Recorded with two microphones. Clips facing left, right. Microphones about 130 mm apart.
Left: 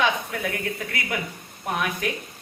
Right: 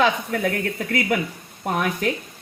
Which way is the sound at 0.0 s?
50° right (ahead or behind).